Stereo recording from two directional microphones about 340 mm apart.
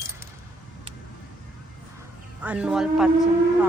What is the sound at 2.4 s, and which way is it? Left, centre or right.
Speech, centre.